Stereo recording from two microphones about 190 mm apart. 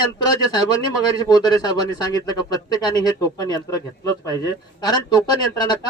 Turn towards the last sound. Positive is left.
turn(degrees=20)  # may be behind; listen again after turning